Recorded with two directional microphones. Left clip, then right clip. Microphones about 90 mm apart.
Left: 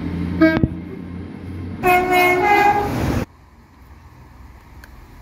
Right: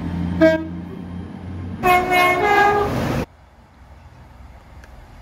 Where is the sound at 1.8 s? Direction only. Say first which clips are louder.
Even; 20° right (ahead or behind).